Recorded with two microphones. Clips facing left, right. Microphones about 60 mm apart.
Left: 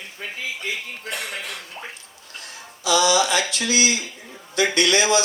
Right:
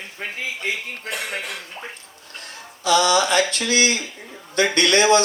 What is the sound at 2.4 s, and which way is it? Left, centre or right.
A man's voice, right.